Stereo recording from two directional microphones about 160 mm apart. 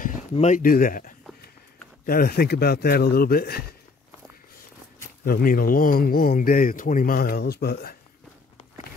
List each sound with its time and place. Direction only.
0.0 s speech: 45° left (ahead or behind); by 3.6 s 70° left (ahead or behind)
5.2 s speech: 65° left (ahead or behind)